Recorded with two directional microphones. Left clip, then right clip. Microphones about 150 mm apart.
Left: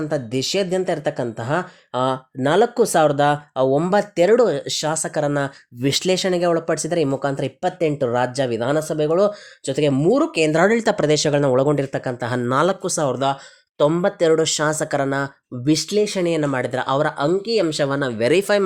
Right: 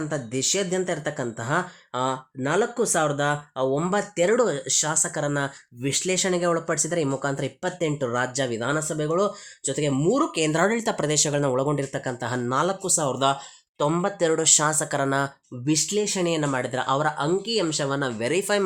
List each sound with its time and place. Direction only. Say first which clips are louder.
0.1 s speech: left 4 dB; 35° left (ahead or behind)
5.8 s speech: left 7 dB; 50° left (ahead or behind)
6.1 s speech: left 4 dB; 30° left (ahead or behind)
12.5 s speech: left 5 dB; 40° left (ahead or behind)